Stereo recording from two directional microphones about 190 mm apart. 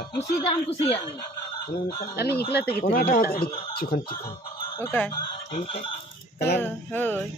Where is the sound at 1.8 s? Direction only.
50° left (ahead or behind).